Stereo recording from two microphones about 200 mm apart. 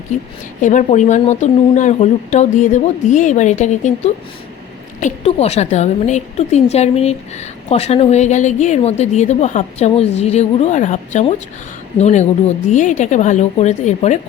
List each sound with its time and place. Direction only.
0.6 s speech: 40° left (ahead or behind)